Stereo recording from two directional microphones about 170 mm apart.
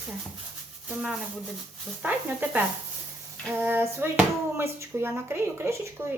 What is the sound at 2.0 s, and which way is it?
Speech, 10° right (ahead or behind).